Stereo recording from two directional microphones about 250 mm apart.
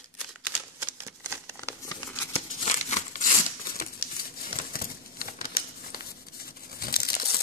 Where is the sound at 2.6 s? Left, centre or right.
Left.